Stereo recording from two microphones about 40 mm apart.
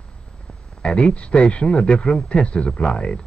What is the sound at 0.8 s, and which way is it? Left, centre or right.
A man's voice, left.